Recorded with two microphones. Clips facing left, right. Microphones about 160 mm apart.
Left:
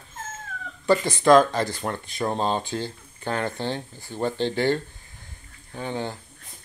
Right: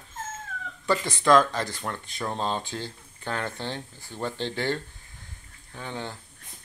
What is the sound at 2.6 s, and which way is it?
Speech, 5° left (ahead or behind).